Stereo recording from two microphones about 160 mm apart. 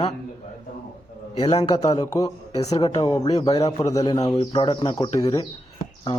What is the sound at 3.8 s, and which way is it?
Speech, 20° left (ahead or behind).